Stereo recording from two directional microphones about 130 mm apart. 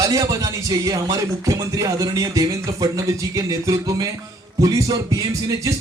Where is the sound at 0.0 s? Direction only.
25° right (ahead or behind).